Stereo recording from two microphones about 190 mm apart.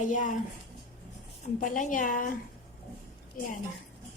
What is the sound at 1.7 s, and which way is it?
Speech, 45° left (ahead or behind).